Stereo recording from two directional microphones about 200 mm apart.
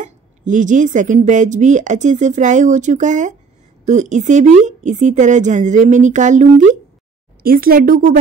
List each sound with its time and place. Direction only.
0.0 s speech: 40° right (ahead or behind)